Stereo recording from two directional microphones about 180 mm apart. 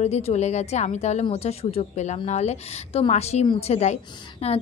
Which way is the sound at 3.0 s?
35° left (ahead or behind).